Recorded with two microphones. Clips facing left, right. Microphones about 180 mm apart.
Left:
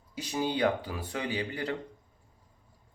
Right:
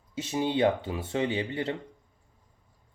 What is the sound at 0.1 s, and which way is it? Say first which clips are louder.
Speech: right 3 dB; 25° right (ahead or behind).